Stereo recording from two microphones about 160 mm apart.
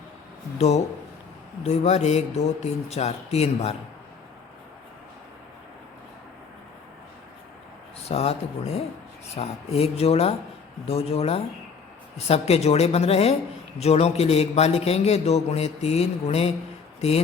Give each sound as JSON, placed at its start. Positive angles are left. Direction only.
{"t": 1.6, "sound": "speech", "side_deg": 45}
{"t": 8.0, "sound": "a man's voice", "side_deg": 40}